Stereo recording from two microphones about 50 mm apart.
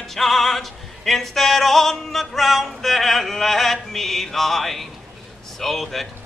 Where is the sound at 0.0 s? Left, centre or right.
Centre.